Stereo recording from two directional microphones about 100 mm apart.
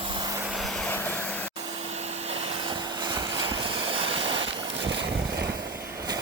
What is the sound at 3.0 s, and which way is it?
Vehicle, 50° right (ahead or behind).